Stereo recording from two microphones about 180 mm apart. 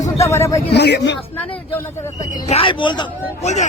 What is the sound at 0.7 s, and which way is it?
Speech, 70° left (ahead or behind).